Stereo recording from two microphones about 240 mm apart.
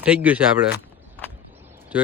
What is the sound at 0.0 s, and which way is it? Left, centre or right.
Speech, centre.